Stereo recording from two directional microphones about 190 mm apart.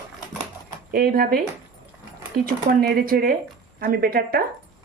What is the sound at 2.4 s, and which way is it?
A woman's voice, 50° right (ahead or behind).